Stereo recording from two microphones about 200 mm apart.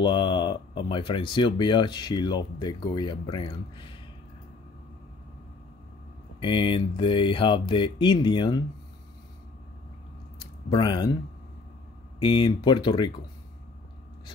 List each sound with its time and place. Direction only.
0.0 s speech: 25° left (ahead or behind)
6.4 s speech: 25° left (ahead or behind)
10.7 s speech: 20° left (ahead or behind)
12.2 s speech: 25° left (ahead or behind)